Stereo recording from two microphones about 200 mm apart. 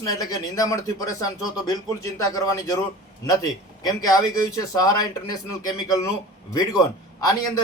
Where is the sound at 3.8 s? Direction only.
20° left (ahead or behind).